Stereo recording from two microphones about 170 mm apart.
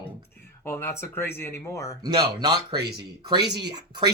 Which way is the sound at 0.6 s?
15° left (ahead or behind).